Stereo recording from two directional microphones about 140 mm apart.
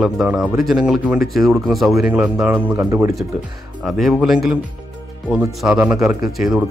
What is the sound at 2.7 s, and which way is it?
Speech, 20° right (ahead or behind).